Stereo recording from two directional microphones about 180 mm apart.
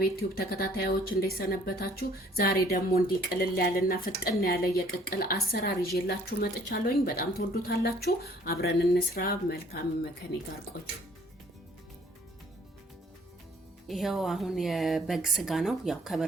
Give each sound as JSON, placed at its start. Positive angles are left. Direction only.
{"t": 0.0, "sound": "speech", "side_deg": 60}
{"t": 13.8, "sound": "a woman's voice", "side_deg": 0}